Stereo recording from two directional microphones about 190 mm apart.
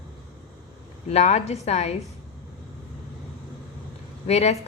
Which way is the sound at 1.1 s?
35° left (ahead or behind).